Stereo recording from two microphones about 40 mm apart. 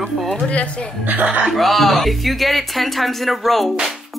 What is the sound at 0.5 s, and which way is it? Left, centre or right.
Speech, left.